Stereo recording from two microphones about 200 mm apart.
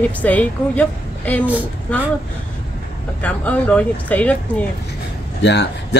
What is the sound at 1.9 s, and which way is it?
Speech, 5° left (ahead or behind).